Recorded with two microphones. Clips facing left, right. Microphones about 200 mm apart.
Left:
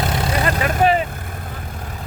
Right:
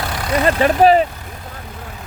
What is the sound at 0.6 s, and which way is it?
Speech, 35° right (ahead or behind).